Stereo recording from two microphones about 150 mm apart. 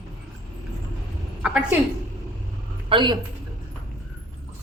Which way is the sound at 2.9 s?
30° right (ahead or behind).